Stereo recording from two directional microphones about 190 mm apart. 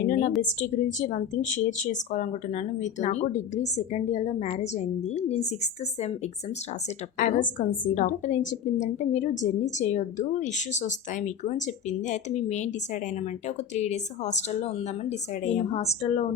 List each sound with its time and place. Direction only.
0.0 s a woman's voice: 45° left (ahead or behind)
7.2 s a woman's voice: 45° left (ahead or behind)